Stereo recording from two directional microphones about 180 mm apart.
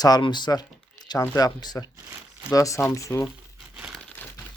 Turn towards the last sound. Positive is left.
turn(degrees=5)  # may be behind; listen again after turning